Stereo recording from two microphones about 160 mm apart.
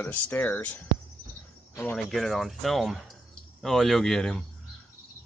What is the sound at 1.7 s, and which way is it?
Cricket, 15° left (ahead or behind).